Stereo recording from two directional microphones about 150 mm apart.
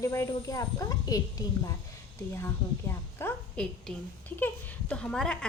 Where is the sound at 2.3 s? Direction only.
15° left (ahead or behind).